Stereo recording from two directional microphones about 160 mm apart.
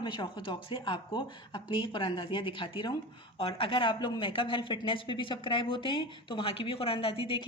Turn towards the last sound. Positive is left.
turn(degrees=35)  # may be behind; listen again after turning